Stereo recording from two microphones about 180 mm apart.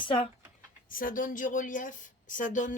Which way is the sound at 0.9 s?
50° left (ahead or behind).